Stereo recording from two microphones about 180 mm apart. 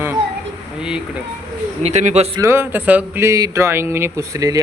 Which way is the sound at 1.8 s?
40° right (ahead or behind).